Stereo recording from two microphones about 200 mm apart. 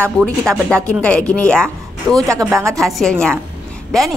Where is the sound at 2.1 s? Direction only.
15° right (ahead or behind).